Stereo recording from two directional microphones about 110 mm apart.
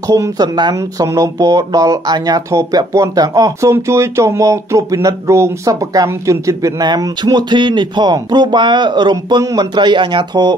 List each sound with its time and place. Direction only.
0.1 s speech: 35° right (ahead or behind)
9.4 s speech: 30° right (ahead or behind)
9.8 s speech: 45° right (ahead or behind)